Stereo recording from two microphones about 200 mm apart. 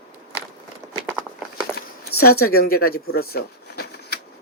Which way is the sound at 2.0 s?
50° left (ahead or behind).